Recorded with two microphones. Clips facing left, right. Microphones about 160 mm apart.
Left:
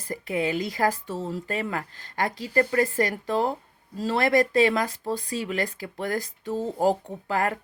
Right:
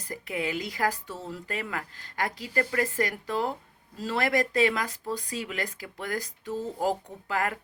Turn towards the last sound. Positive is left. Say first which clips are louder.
# left 4 dB
turn(degrees=35)  # may be behind; listen again after turning